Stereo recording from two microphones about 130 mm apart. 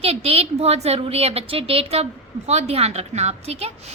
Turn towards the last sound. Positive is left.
turn(degrees=-55)  # may be behind; listen again after turning